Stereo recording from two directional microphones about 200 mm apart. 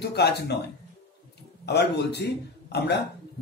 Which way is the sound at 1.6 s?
55° left (ahead or behind).